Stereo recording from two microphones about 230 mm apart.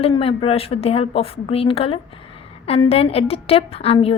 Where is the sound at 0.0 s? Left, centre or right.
Left.